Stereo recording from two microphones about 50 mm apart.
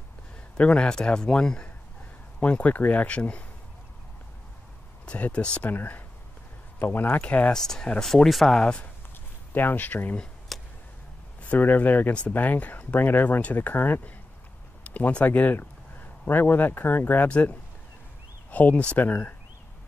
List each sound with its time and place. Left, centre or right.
0.6 s a man's voice: left
5.0 s speech: left
5.7 s speech: left
7.5 s a man's voice: centre
8.5 s a man's voice: centre
9.5 s speech: left
10.5 s a sound: centre
11.4 s speech: left